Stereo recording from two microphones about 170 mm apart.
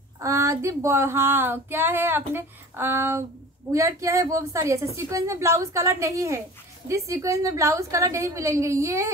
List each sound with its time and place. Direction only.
0.2 s female singing: 15° right (ahead or behind)